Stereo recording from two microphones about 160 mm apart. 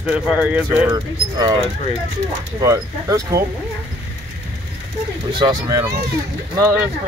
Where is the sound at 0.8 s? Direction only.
25° right (ahead or behind).